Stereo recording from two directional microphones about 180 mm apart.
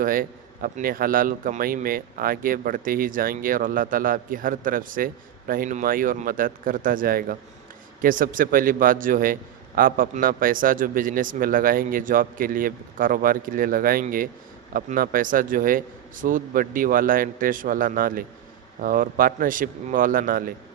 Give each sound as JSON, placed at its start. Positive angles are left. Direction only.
{"t": 0.0, "sound": "a man's voice", "side_deg": -50}